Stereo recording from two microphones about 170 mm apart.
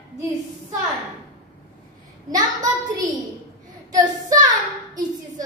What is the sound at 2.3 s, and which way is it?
Child singing, 20° right (ahead or behind).